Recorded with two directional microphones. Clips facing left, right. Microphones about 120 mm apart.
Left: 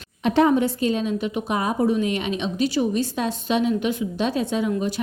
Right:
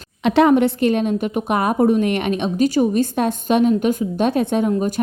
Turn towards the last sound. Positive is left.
turn(degrees=-45)  # may be behind; listen again after turning